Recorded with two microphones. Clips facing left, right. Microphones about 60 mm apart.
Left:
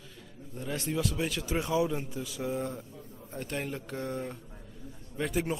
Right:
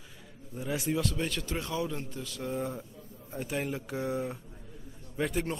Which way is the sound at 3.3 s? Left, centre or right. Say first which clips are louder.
Right 2 dB; centre.